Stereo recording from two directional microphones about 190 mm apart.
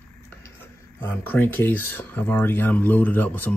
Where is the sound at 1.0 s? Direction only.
10° left (ahead or behind).